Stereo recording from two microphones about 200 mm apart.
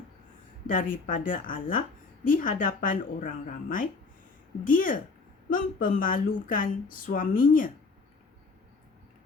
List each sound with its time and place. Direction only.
0.7 s speech: 45° left (ahead or behind)